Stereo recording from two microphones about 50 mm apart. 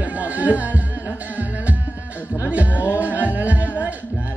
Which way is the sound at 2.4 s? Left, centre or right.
Right.